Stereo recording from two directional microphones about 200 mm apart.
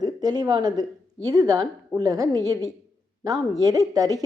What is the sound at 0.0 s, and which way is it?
A woman's voice, 20° right (ahead or behind).